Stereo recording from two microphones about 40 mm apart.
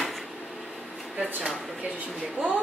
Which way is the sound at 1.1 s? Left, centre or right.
Right.